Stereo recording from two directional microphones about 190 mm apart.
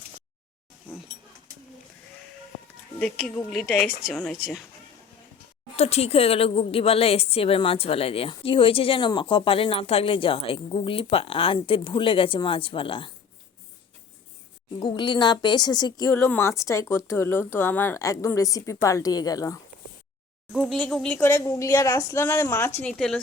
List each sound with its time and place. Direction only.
3.0 s speech: 5° left (ahead or behind)
5.7 s a woman's voice: 35° left (ahead or behind)
14.8 s a woman's voice: 25° left (ahead or behind)
20.5 s a woman's voice: centre (ahead or behind)